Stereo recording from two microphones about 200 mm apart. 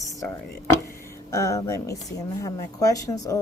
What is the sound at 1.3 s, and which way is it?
Speech, 15° left (ahead or behind).